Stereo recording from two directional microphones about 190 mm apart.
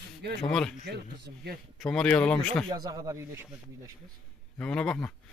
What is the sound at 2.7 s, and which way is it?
Speech, 20° right (ahead or behind).